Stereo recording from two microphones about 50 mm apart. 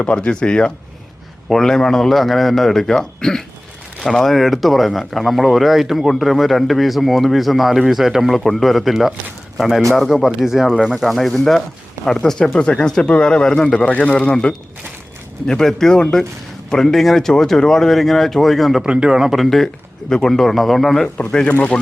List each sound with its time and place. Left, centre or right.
0.0 s speech: left
1.5 s a man's voice: centre; by 14.3 s left
15.4 s a man's voice: centre
18.8 s speech: centre
19.5 s speech: centre